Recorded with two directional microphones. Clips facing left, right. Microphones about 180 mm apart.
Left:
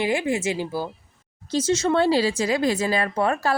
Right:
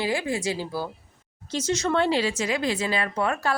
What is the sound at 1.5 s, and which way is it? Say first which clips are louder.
Speech: left 4 dB; 30° left (ahead or behind).